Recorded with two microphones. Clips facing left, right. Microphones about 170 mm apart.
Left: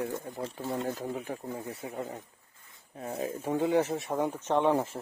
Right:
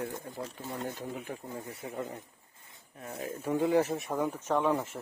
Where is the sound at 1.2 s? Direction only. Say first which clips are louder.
Left 3 dB; 30° left (ahead or behind).